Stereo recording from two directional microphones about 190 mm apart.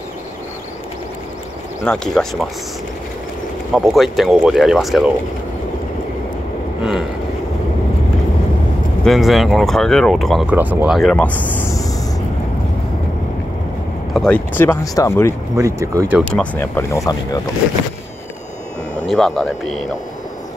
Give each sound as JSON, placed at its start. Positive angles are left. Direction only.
{"t": 1.8, "sound": "speech", "side_deg": 0}
{"t": 3.7, "sound": "speech", "side_deg": 0}
{"t": 9.0, "sound": "speech", "side_deg": 0}
{"t": 11.0, "sound": "speech", "side_deg": 5}
{"t": 14.1, "sound": "speech", "side_deg": 5}
{"t": 14.6, "sound": "speech", "side_deg": 15}
{"t": 15.5, "sound": "speech", "side_deg": -15}
{"t": 16.5, "sound": "speech", "side_deg": 15}
{"t": 19.0, "sound": "speech", "side_deg": 0}